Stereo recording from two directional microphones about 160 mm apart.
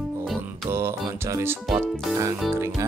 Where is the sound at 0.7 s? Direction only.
15° right (ahead or behind).